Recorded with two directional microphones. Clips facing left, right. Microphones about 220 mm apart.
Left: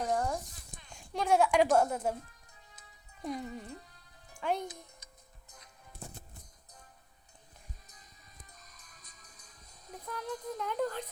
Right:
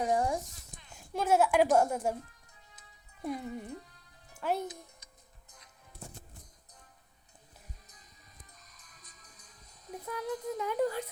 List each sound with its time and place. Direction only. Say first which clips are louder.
0.0 s a sound: right 3 dB; 10° right (ahead or behind)
0.9 s a child's voice: right 1 dB; 5° right (ahead or behind)
3.2 s speech: right 2 dB; 10° right (ahead or behind)
8.7 s music: left 1 dB; 45° left (ahead or behind)
10.1 s speech: right 3 dB; 5° right (ahead or behind)